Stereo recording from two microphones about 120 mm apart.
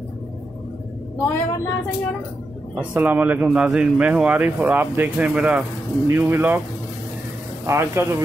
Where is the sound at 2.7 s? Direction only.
10° right (ahead or behind).